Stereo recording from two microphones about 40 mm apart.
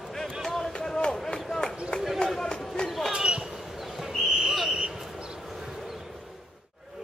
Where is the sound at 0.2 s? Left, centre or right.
Centre.